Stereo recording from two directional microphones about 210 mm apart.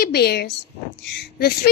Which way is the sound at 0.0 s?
50° left (ahead or behind).